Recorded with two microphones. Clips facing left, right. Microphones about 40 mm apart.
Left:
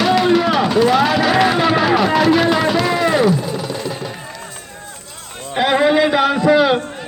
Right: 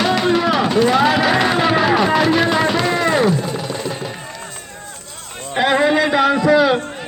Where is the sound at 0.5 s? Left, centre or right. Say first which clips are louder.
Left 1 dB; centre.